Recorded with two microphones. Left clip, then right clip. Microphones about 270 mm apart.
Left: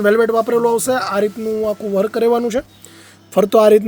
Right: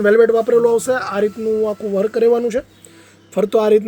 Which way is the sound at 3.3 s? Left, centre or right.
Left.